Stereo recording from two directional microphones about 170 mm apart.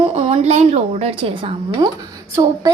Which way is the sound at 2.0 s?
20° right (ahead or behind).